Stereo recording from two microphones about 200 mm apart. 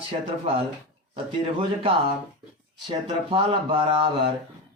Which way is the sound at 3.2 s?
25° right (ahead or behind).